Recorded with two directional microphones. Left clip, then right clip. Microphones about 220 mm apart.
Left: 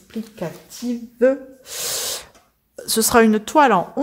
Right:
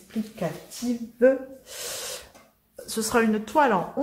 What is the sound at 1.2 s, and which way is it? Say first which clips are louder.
Gasp: left 3 dB; 45° left (ahead or behind).